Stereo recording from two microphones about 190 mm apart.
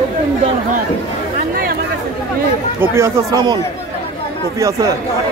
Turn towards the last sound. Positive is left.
turn(degrees=-20)  # may be behind; listen again after turning